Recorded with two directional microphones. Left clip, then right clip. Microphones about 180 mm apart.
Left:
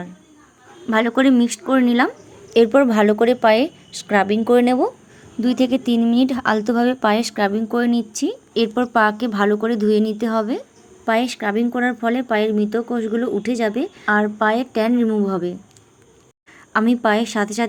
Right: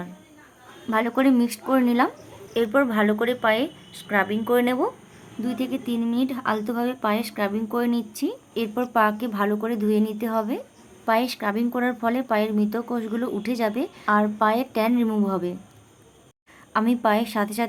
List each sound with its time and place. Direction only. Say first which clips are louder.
0.9 s speech: left 5 dB; 20° left (ahead or behind)
2.5 s speech: left 8 dB; 35° left (ahead or behind); by 15.5 s 15° left (ahead or behind)
16.7 s speech: left 4 dB; 20° left (ahead or behind)